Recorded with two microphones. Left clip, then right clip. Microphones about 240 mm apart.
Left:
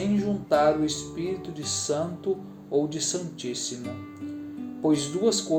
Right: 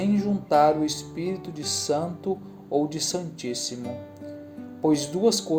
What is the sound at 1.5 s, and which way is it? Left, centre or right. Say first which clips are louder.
Speech: right 2 dB; right.